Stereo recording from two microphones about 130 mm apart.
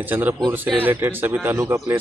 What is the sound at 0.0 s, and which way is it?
A man's voice, 15° right (ahead or behind).